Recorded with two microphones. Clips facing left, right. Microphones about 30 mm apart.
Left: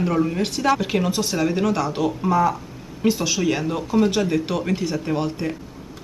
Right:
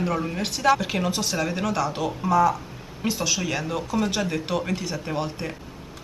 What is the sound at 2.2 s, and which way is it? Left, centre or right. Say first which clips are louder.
Speech: right 1 dB; centre.